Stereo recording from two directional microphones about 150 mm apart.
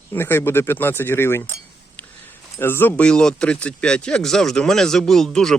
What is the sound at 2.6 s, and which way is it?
Speech, 15° left (ahead or behind).